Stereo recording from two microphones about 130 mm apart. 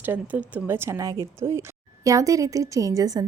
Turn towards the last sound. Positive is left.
turn(degrees=-30)  # may be behind; listen again after turning